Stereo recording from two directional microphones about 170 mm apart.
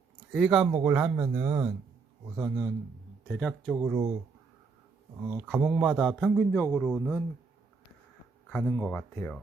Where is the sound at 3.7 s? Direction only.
15° right (ahead or behind).